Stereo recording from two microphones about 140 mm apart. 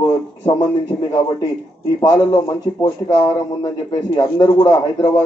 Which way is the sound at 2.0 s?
25° left (ahead or behind).